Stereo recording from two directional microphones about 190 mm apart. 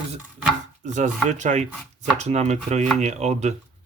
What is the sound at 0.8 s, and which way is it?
Speech, 40° right (ahead or behind).